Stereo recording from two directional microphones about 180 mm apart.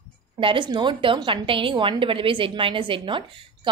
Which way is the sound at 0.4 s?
30° right (ahead or behind).